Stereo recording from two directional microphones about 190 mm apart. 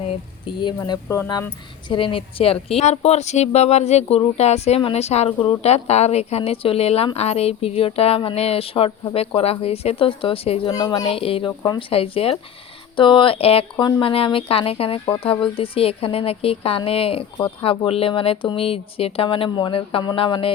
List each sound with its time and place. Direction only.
0.1 s speech: 25° left (ahead or behind)
0.8 s a woman's voice: 15° left (ahead or behind); by 10.6 s 30° left (ahead or behind)
10.7 s speech: 20° left (ahead or behind)
11.1 s a woman's voice: 30° left (ahead or behind)